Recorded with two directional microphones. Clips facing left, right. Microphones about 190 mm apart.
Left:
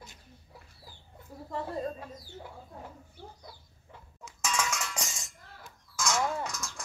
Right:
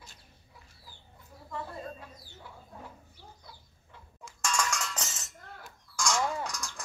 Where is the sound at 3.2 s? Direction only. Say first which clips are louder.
Left 7 dB; 55° left (ahead or behind).